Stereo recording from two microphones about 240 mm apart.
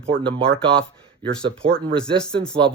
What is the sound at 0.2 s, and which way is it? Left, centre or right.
Speech, centre.